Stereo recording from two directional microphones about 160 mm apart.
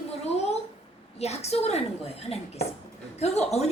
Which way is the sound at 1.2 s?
40° left (ahead or behind).